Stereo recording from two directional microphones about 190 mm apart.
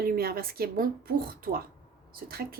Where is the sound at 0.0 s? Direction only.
50° right (ahead or behind).